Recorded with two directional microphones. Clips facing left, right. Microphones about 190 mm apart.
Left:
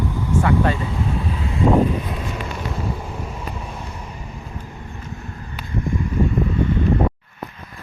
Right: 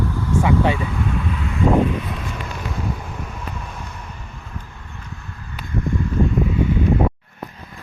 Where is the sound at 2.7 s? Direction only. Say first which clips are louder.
Left 1 dB; 5° left (ahead or behind).